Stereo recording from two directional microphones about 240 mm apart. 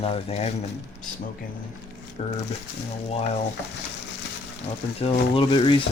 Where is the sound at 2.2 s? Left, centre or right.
Left.